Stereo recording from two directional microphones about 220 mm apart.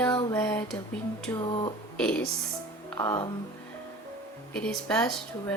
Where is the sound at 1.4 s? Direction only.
20° left (ahead or behind).